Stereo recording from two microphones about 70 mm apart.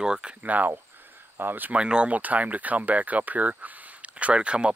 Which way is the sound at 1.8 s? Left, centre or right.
Centre.